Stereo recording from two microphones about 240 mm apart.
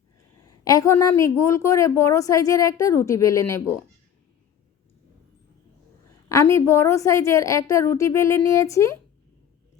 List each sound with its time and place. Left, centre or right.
0.4 s a woman's voice: centre
6.2 s a woman's voice: centre